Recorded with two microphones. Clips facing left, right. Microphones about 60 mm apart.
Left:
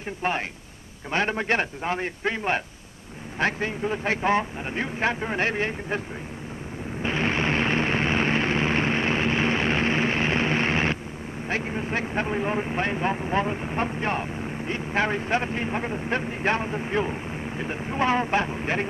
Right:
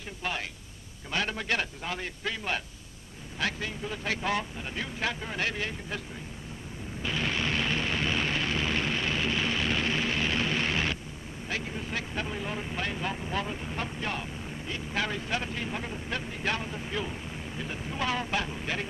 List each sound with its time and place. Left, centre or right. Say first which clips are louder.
1.1 s speech: left 6 dB; left
7.0 s a sound: left 6 dB; left
11.4 s speech: left 6 dB; left